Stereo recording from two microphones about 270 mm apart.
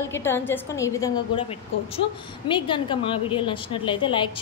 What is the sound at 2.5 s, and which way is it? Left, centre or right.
A woman's voice, centre.